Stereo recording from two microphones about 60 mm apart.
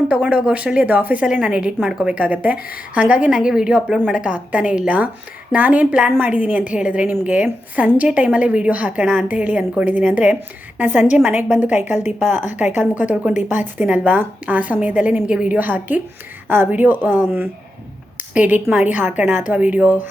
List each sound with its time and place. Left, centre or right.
0.1 s a woman's voice: right
2.1 s a woman's voice: right